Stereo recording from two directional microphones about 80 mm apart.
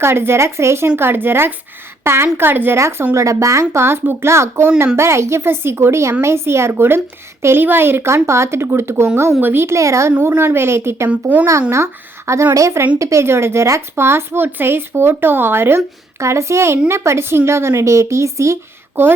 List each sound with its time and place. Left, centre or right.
0.0 s a woman's voice: right
11.1 s a woman's voice: centre
11.7 s a woman's voice: right